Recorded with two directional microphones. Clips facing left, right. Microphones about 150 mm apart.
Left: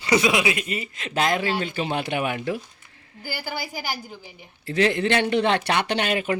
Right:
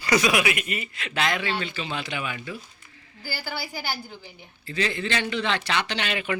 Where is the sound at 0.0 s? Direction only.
25° left (ahead or behind).